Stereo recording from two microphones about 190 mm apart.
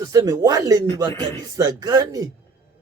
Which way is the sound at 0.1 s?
20° right (ahead or behind).